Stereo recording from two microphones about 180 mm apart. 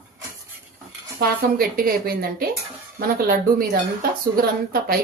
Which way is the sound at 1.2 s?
55° right (ahead or behind).